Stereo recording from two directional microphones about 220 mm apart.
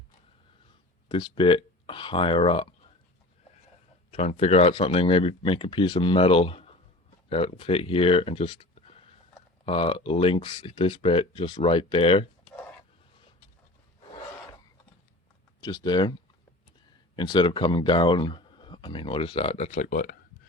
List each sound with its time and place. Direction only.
1.0 s speech: 20° left (ahead or behind)
4.1 s speech: 30° left (ahead or behind)
15.6 s speech: 20° left (ahead or behind)
17.2 s speech: 20° left (ahead or behind); by 20.1 s 35° left (ahead or behind)